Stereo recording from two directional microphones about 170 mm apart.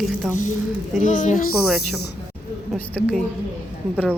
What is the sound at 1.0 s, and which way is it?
Speech, 45° left (ahead or behind).